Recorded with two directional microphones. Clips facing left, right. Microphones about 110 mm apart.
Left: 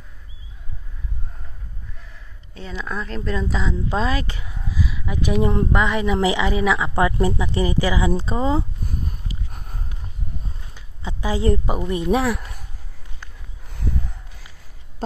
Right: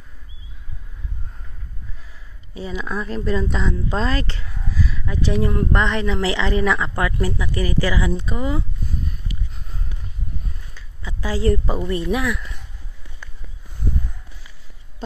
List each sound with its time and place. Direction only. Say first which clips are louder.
2.5 s speech: right 3 dB; 5° right (ahead or behind)
7.0 s speech: left 4 dB; 25° left (ahead or behind)
8.2 s speech: left 3 dB; 30° left (ahead or behind)
8.8 s a sound: even; 50° left (ahead or behind)
10.7 s speech: left 6 dB; 20° left (ahead or behind)
12.1 s a sound: left 3 dB; 30° left (ahead or behind)